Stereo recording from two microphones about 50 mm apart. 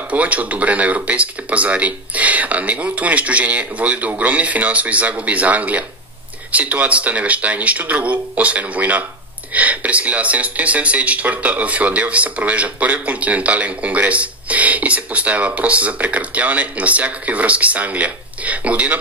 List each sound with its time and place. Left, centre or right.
0.1 s speech: right